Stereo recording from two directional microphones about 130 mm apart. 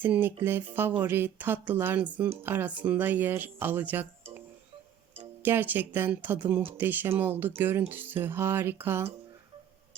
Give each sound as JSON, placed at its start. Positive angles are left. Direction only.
{"t": 0.0, "sound": "speech", "side_deg": -15}
{"t": 5.4, "sound": "speech", "side_deg": -15}